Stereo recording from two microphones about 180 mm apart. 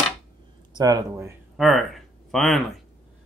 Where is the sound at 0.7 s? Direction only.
20° right (ahead or behind).